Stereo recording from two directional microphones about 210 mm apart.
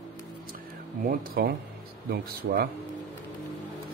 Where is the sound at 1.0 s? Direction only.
45° right (ahead or behind).